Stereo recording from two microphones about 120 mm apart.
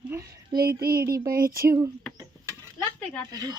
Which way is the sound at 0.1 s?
25° right (ahead or behind).